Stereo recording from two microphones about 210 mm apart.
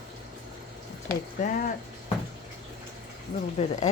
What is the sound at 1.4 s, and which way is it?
Speech, 40° left (ahead or behind).